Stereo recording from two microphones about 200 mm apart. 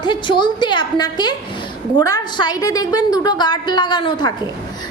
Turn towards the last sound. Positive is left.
turn(degrees=25)  # may be behind; listen again after turning